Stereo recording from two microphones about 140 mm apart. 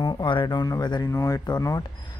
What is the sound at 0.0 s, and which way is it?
Speech, 35° left (ahead or behind).